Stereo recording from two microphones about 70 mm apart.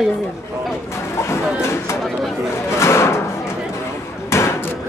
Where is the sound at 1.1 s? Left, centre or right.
Left.